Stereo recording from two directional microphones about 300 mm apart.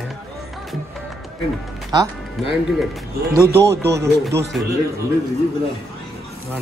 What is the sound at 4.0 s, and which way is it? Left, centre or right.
Speech, centre.